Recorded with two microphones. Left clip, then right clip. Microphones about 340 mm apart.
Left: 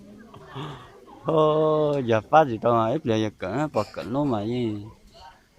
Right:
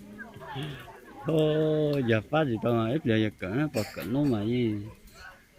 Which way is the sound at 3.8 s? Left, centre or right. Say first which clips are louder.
Left 4 dB; left.